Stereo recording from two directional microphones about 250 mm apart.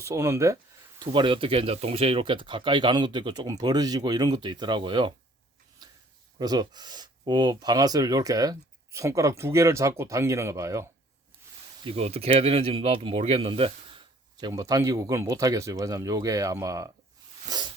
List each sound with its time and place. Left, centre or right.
0.0 s speech: centre
6.4 s speech: centre
17.5 s hiss: centre